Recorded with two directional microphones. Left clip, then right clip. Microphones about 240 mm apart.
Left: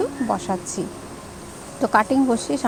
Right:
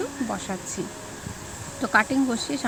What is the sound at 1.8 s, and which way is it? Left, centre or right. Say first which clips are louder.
Speech: left 4 dB; centre.